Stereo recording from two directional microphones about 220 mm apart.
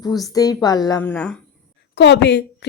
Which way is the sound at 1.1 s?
5° left (ahead or behind).